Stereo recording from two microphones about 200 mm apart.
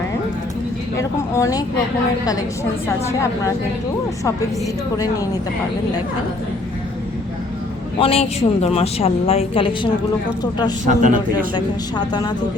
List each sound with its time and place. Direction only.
0.9 s a woman's voice: 15° left (ahead or behind)
3.1 s a woman's voice: 15° left (ahead or behind)
7.9 s speech: 30° left (ahead or behind)
10.8 s a man's voice: 40° right (ahead or behind)
11.5 s speech: 20° left (ahead or behind)